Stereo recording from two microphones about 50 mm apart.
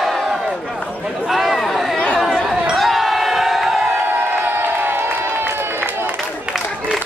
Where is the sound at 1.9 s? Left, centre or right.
Centre.